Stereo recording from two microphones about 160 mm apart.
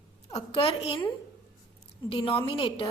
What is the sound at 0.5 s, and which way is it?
Speech, 35° left (ahead or behind).